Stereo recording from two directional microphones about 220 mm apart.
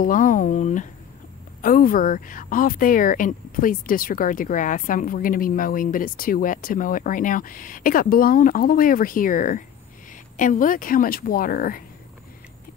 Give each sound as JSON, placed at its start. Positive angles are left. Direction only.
{"t": 0.0, "sound": "speech", "side_deg": 35}